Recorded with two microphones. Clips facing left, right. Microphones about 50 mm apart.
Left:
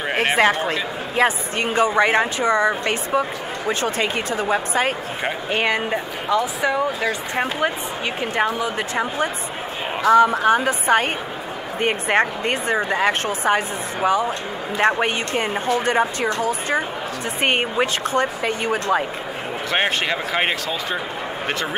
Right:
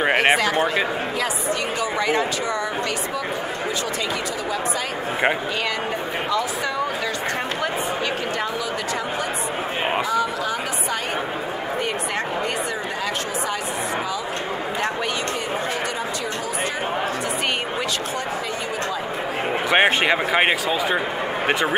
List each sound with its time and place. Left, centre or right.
0.0 s a sound: right
1.1 s a woman's voice: left
10.0 s a woman's voice: left
14.8 s a woman's voice: left
18.7 s speech: left
19.7 s speech: centre